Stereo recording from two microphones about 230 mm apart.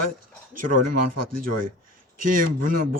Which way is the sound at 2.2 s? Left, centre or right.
Right.